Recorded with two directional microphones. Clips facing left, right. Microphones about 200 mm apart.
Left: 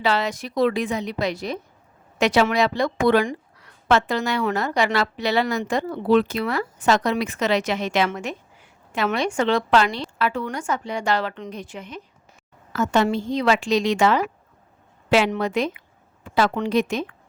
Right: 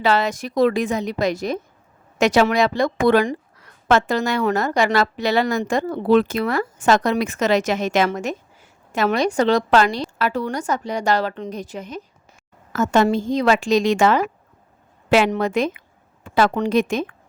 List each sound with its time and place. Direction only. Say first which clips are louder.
0.0 s speech: right 3 dB; 45° right (ahead or behind)